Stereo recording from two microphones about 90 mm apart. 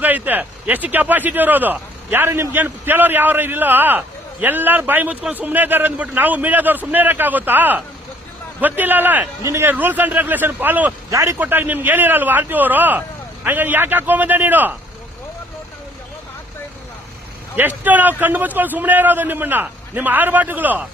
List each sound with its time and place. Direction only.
0.0 s a man's voice: 20° right (ahead or behind)
11.1 s a man's voice: 35° right (ahead or behind)
11.3 s a man's voice: 20° right (ahead or behind)
17.6 s a man's voice: 20° right (ahead or behind)